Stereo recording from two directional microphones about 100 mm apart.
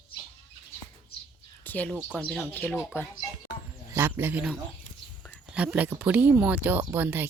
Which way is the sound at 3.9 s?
25° right (ahead or behind).